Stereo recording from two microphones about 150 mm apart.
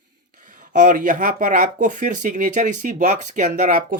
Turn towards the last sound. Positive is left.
turn(degrees=-60)  # may be behind; listen again after turning